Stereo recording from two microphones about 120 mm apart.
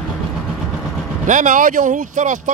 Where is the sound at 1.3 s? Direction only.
90° right.